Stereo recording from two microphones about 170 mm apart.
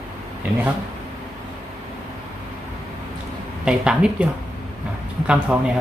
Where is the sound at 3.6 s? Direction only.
5° right (ahead or behind).